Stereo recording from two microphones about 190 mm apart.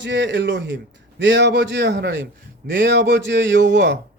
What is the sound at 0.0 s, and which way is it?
A man's voice, 65° right (ahead or behind).